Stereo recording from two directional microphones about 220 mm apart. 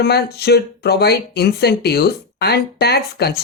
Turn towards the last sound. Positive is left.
turn(degrees=45)  # may be behind; listen again after turning